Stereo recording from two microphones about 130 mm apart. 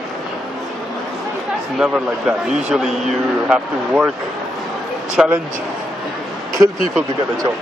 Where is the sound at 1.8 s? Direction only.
5° right (ahead or behind).